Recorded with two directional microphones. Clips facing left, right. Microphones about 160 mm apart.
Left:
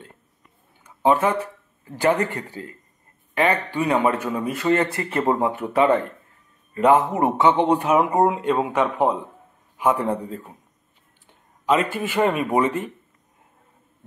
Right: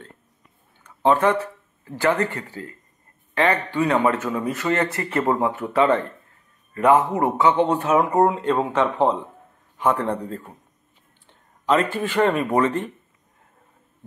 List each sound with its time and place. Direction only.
0.8 s a man's voice: 10° left (ahead or behind)
11.6 s speech: 10° left (ahead or behind)